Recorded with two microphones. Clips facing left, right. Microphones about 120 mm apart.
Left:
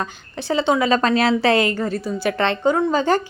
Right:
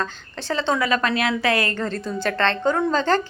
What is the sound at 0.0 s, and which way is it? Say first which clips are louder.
Speech: left 1 dB; 15° left (ahead or behind).